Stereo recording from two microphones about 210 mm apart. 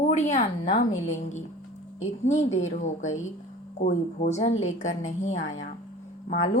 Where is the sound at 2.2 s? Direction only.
35° left (ahead or behind).